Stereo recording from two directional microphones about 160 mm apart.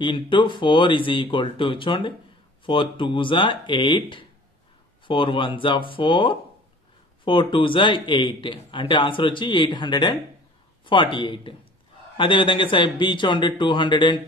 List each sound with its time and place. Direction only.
0.0 s a man's voice: 30° left (ahead or behind)